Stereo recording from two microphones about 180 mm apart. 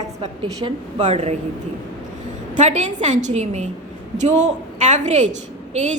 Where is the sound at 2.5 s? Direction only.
40° right (ahead or behind).